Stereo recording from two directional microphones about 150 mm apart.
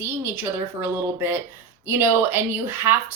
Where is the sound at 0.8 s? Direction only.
15° right (ahead or behind).